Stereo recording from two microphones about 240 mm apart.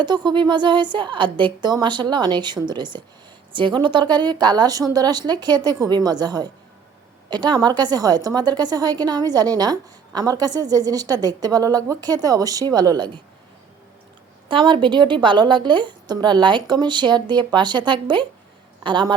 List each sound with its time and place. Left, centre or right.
0.0 s a woman's voice: centre
14.4 s a woman's voice: centre